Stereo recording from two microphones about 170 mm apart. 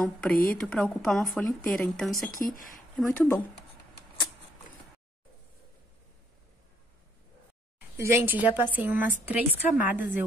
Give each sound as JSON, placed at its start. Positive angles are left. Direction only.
{"t": 0.0, "sound": "speech", "side_deg": 5}
{"t": 2.4, "sound": "speech", "side_deg": 55}
{"t": 3.0, "sound": "speech", "side_deg": 10}
{"t": 8.0, "sound": "a woman's voice", "side_deg": -15}